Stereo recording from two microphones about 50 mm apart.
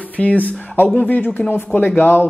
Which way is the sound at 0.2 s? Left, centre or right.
Left.